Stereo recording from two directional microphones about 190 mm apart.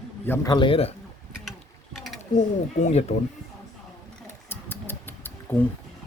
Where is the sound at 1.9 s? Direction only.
Centre (ahead or behind).